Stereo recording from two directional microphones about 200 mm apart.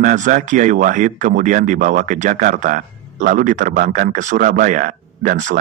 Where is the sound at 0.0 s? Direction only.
40° right (ahead or behind).